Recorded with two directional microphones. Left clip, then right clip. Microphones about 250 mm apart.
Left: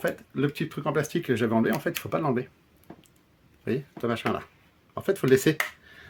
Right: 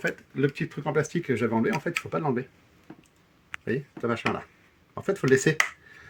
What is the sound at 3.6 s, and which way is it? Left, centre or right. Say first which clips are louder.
Speech: even; left.